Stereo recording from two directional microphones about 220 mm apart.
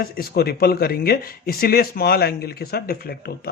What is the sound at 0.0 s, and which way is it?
Speech, 45° left (ahead or behind).